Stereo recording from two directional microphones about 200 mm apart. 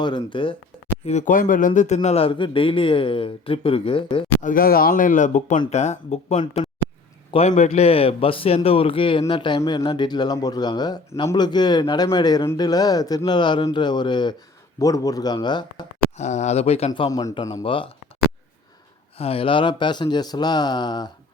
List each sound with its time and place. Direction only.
0.0 s a man's voice: 25° left (ahead or behind)
1.0 s a man's voice: 35° left (ahead or behind)
4.4 s a man's voice: 40° left (ahead or behind); by 15.9 s 20° left (ahead or behind)
16.1 s a man's voice: 35° left (ahead or behind)
19.2 s a man's voice: 30° left (ahead or behind)